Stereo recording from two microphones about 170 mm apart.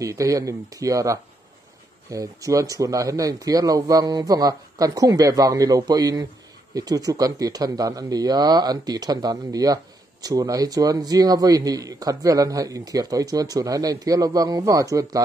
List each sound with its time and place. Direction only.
0.0 s a man's voice: 20° right (ahead or behind)